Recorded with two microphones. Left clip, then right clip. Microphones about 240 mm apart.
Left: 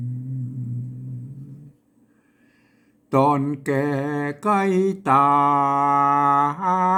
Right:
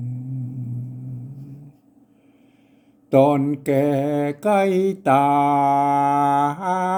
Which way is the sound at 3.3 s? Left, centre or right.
Centre.